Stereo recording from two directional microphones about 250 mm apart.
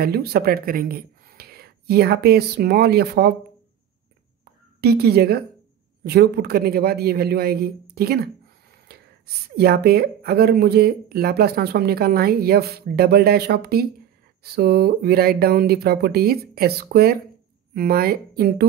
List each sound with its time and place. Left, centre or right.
0.0 s speech: right
4.7 s speech: right
9.6 s speech: right